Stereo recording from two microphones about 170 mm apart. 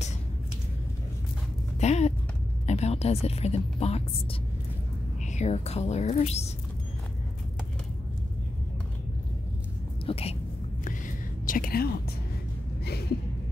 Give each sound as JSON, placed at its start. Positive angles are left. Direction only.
{"t": 1.8, "sound": "a woman's voice", "side_deg": 40}
{"t": 10.0, "sound": "speech", "side_deg": 35}
{"t": 10.8, "sound": "whispering", "side_deg": 50}
{"t": 12.8, "sound": "a sound", "side_deg": 70}